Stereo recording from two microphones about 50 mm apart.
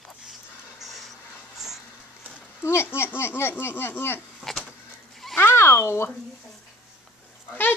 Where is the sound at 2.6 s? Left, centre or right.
Left.